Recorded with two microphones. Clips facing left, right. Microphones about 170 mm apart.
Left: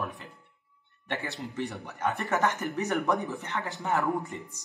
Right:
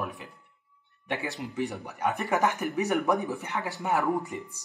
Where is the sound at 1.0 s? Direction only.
15° right (ahead or behind).